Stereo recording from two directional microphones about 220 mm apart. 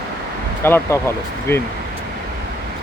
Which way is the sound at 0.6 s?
10° left (ahead or behind).